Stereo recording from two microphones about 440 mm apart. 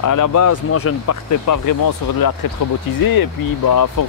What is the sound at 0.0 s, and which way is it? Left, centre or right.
Speech, left.